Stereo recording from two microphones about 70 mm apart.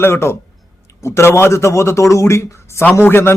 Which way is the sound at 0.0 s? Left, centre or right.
Left.